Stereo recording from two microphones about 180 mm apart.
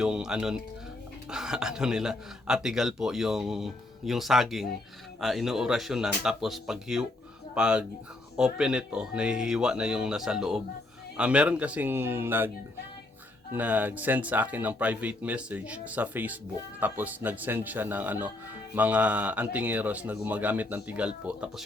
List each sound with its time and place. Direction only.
0.0 s speech: 5° right (ahead or behind)
13.5 s speech: 10° right (ahead or behind)